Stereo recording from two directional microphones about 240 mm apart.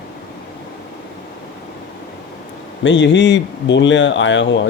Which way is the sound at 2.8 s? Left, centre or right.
Left.